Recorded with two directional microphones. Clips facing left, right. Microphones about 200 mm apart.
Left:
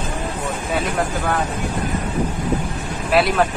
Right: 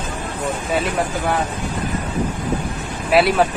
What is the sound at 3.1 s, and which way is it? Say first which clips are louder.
Speech: right 2 dB; 10° right (ahead or behind).